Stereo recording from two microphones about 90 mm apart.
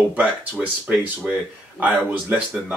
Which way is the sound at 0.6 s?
20° right (ahead or behind).